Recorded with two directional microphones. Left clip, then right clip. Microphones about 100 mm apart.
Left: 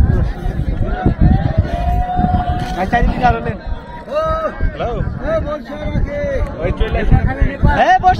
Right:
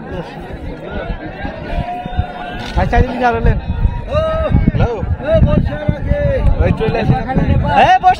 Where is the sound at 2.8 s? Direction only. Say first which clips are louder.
Right 1 dB; 80° right.